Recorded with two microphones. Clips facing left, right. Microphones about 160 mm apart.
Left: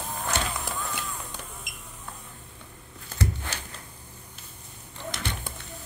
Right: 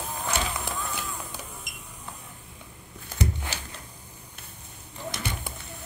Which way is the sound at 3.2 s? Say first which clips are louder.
Right 1 dB; 15° right (ahead or behind).